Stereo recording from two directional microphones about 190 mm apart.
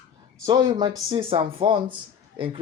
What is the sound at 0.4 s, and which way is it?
Speech, 20° right (ahead or behind).